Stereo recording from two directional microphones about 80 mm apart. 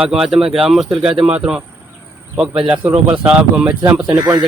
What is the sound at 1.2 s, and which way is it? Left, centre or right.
Speech, centre.